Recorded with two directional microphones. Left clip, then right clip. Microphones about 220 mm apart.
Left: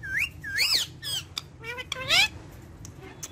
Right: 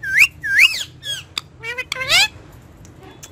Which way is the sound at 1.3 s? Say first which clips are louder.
Right 10 dB; 20° right (ahead or behind).